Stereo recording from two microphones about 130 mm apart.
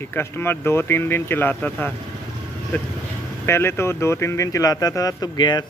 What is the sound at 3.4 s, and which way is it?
A man's voice, 20° left (ahead or behind).